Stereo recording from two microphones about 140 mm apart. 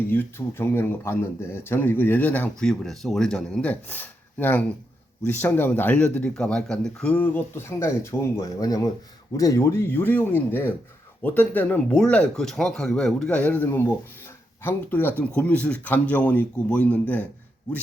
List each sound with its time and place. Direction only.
0.1 s speech: 15° left (ahead or behind)